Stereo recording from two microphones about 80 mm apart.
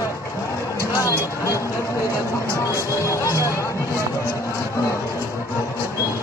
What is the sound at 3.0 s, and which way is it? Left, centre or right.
Speech, left.